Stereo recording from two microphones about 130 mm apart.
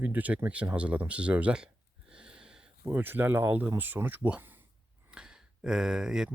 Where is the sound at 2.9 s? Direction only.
15° right (ahead or behind).